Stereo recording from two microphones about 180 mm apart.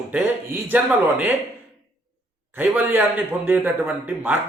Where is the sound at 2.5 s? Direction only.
10° right (ahead or behind).